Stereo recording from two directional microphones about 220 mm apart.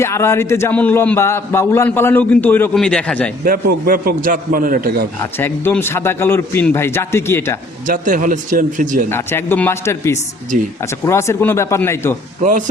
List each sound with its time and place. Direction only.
0.0 s a man's voice: 10° left (ahead or behind)
3.4 s a man's voice: 40° right (ahead or behind)
5.2 s a man's voice: 10° left (ahead or behind)
7.9 s a man's voice: 40° right (ahead or behind)
9.0 s a man's voice: 10° left (ahead or behind)
12.4 s a man's voice: 35° right (ahead or behind)